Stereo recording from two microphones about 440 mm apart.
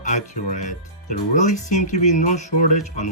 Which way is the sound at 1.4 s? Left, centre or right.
Centre.